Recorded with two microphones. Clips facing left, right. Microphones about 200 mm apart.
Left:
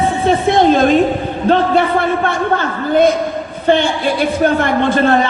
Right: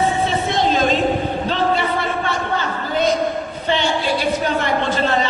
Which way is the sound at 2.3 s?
55° left (ahead or behind).